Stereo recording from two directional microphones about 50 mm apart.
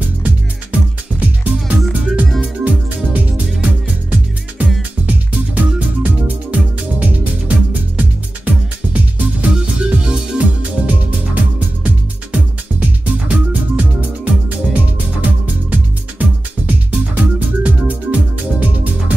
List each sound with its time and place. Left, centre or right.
0.0 s music: right